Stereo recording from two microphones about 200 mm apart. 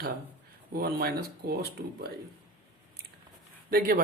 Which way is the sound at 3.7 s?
45° right (ahead or behind).